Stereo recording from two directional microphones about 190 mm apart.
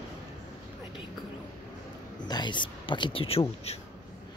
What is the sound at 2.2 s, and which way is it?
Speech, 20° left (ahead or behind).